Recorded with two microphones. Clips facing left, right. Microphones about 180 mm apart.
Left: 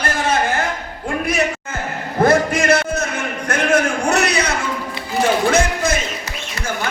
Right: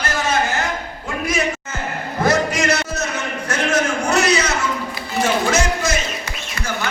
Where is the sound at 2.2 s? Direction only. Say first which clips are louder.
Left 3 dB; 55° left (ahead or behind).